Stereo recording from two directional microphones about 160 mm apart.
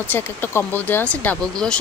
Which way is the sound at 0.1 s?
10° left (ahead or behind).